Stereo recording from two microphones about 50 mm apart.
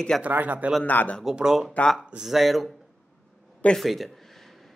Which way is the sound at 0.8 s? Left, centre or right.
Left.